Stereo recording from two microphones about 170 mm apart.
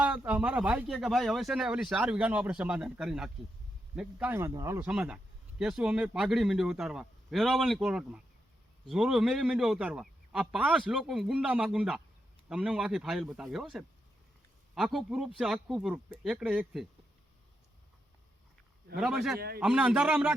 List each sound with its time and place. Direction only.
0.0 s speech: 10° right (ahead or behind)
4.9 s speech: 5° right (ahead or behind)
18.9 s speech: 5° right (ahead or behind)